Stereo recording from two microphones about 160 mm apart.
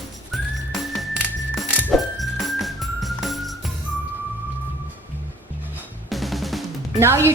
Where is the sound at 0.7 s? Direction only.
Centre (ahead or behind).